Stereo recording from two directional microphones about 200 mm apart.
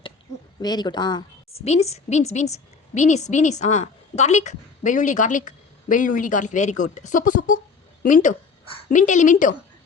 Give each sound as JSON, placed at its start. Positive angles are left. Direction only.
{"t": 0.6, "sound": "speech", "side_deg": 20}
{"t": 1.6, "sound": "a woman's voice", "side_deg": 35}